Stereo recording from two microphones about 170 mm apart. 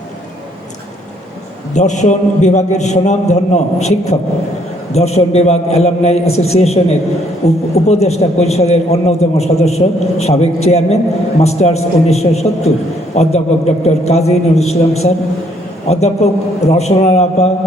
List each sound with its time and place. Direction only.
1.7 s a man's voice: 45° left (ahead or behind)